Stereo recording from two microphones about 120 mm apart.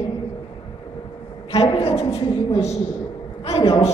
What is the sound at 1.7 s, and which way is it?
A woman's voice, 55° left (ahead or behind).